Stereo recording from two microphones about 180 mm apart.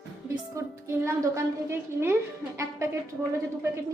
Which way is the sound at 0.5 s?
15° right (ahead or behind).